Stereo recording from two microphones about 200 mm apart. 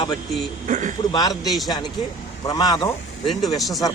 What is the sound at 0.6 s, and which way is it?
Speech, 40° right (ahead or behind).